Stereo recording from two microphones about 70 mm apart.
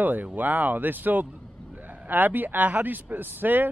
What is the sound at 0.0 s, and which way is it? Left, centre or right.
A man's voice, right.